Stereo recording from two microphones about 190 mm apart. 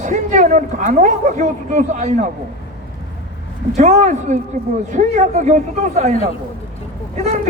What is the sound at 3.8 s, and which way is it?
A man's voice, 40° right (ahead or behind).